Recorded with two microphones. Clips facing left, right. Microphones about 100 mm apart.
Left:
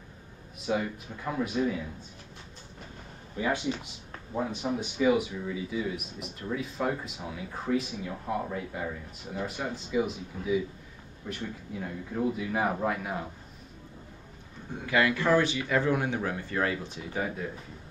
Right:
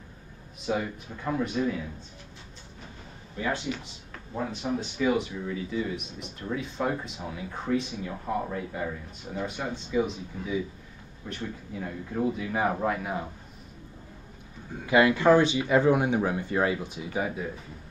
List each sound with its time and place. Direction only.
0.7 s speech: centre (ahead or behind)
3.3 s speech: 15° left (ahead or behind); by 13.3 s centre (ahead or behind)
14.9 s speech: 20° right (ahead or behind)